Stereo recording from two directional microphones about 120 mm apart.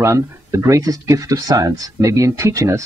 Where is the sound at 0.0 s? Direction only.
25° right (ahead or behind).